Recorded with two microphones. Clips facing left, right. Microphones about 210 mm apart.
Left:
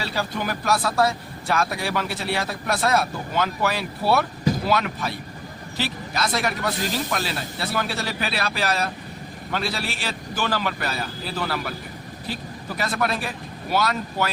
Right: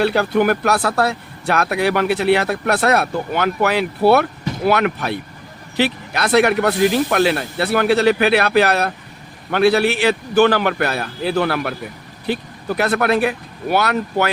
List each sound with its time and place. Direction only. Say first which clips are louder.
0.0 s speech: right 12 dB; 60° right (ahead or behind)